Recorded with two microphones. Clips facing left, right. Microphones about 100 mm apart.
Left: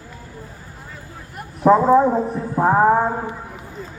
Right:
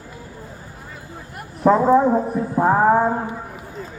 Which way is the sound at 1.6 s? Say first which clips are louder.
Left 1 dB; centre (ahead or behind).